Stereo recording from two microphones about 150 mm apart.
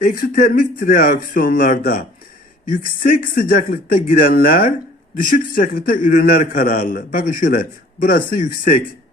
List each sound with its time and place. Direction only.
0.0 s a man's voice: 70° left (ahead or behind)